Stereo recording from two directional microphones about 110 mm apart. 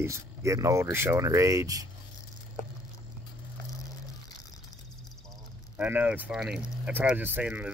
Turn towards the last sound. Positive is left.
turn(degrees=-15)  # may be behind; listen again after turning